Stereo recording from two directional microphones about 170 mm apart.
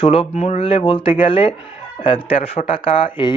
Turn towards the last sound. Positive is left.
turn(degrees=30)  # may be behind; listen again after turning